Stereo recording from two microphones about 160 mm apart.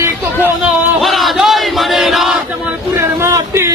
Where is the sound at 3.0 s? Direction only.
15° right (ahead or behind).